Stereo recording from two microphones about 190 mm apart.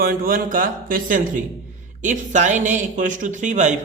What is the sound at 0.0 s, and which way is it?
Speech, 50° right (ahead or behind).